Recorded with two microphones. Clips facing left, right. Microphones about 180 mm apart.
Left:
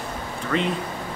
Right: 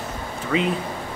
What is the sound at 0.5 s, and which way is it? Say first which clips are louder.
Speech: right 2 dB; 5° right (ahead or behind).